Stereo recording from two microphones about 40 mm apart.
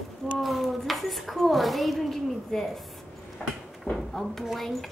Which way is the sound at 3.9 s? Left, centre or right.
Centre.